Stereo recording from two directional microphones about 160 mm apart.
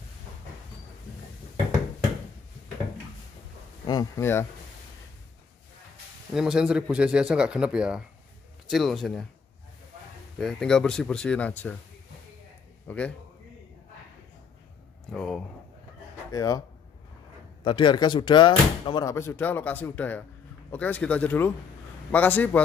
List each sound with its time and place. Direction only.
3.8 s speech: 25° left (ahead or behind)
6.3 s speech: 5° right (ahead or behind)
10.4 s speech: 5° left (ahead or behind)
12.8 s a man's voice: 10° left (ahead or behind)
15.0 s speech: 5° left (ahead or behind)
16.3 s speech: 20° left (ahead or behind)
17.6 s speech: 30° left (ahead or behind)
19.0 s speech: 15° left (ahead or behind)